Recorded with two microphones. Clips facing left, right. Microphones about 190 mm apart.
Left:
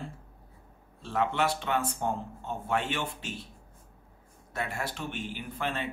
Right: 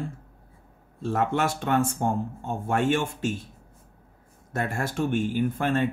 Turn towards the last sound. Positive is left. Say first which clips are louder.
# right 10 dB
turn(degrees=-50)  # may be behind; listen again after turning